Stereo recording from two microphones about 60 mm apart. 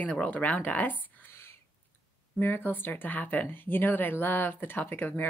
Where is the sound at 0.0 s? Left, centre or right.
Left.